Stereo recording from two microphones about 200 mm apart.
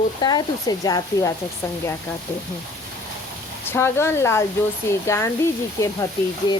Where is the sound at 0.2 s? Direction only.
20° left (ahead or behind).